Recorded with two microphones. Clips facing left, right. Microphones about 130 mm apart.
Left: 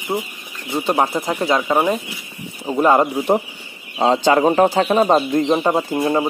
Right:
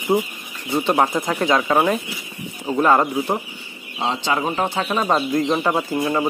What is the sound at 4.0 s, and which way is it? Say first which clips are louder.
Speech: left 8 dB; 45° left (ahead or behind).